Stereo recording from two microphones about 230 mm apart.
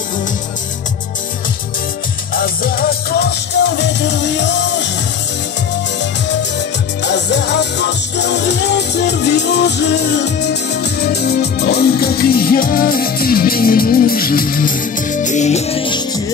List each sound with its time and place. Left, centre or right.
2.3 s music: left
7.0 s music: left